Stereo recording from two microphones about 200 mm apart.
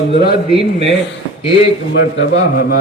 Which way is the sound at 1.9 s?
55° left (ahead or behind).